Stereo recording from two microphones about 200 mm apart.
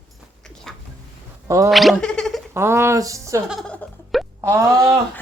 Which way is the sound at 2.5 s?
10° right (ahead or behind).